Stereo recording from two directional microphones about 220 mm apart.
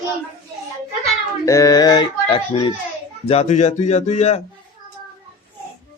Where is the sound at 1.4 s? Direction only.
15° left (ahead or behind); by 4.4 s 30° left (ahead or behind).